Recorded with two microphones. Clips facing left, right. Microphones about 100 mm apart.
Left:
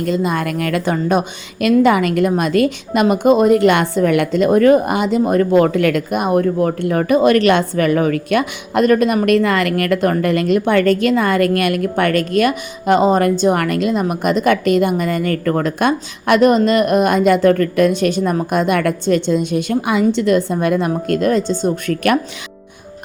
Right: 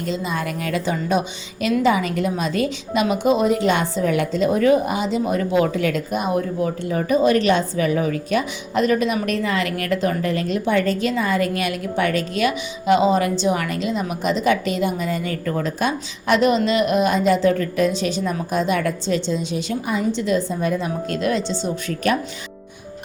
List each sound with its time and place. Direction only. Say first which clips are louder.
0.0 s a woman's voice: left 6 dB; 55° left (ahead or behind)
21.1 s a woman's voice: left 6 dB; 45° left (ahead or behind)